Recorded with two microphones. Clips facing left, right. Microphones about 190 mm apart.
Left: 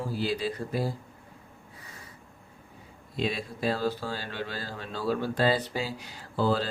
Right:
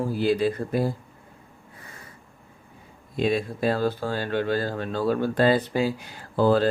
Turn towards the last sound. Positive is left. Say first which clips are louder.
# right 7 dB
turn(degrees=-55)  # may be behind; listen again after turning